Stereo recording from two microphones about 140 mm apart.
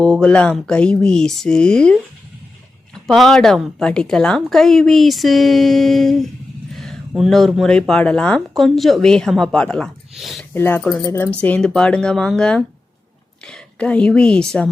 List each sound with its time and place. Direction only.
0.0 s speech: 5° left (ahead or behind)
3.1 s speech: 5° left (ahead or behind)
10.5 s speech: 15° left (ahead or behind)